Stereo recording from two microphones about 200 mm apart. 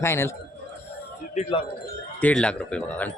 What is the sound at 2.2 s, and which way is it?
Speech, 5° left (ahead or behind).